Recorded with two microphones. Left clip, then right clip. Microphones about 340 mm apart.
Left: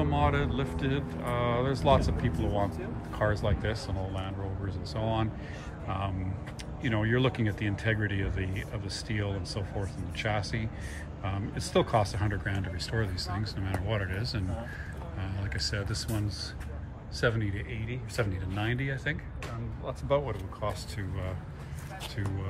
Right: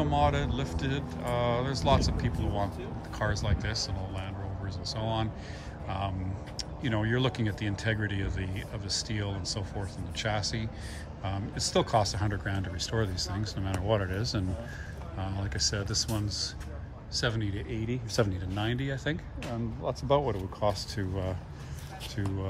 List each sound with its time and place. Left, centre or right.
0.0 s speech: centre